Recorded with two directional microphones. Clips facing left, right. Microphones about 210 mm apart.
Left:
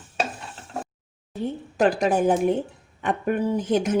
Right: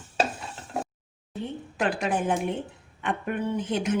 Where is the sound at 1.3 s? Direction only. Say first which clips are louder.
Left 5 dB; 40° left (ahead or behind).